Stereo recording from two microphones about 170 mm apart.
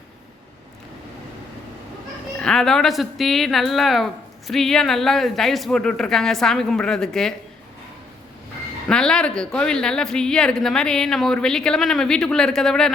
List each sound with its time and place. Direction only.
2.4 s speech: 5° left (ahead or behind)
8.9 s speech: 5° left (ahead or behind)